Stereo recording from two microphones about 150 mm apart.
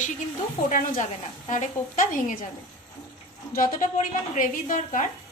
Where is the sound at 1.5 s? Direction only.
55° left (ahead or behind).